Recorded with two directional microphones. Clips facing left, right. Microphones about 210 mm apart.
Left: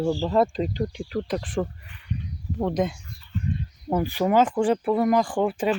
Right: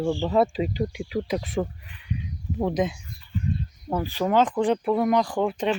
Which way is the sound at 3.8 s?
15° left (ahead or behind).